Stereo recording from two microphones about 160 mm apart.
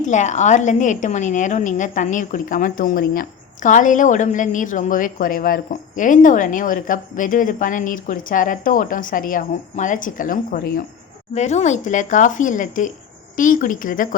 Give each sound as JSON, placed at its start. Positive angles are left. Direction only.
{"t": 0.1, "sound": "a woman's voice", "side_deg": 50}
{"t": 11.3, "sound": "a woman's voice", "side_deg": 45}